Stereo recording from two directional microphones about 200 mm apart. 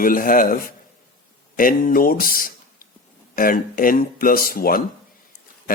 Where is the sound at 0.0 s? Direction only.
45° left (ahead or behind).